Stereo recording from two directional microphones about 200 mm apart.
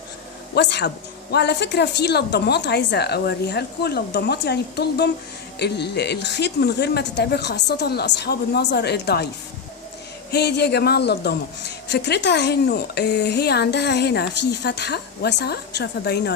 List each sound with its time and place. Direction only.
0.5 s a woman's voice: 55° left (ahead or behind)
10.3 s a woman's voice: 55° left (ahead or behind)